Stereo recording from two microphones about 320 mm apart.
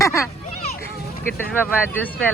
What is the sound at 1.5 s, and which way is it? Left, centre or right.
Speech, centre.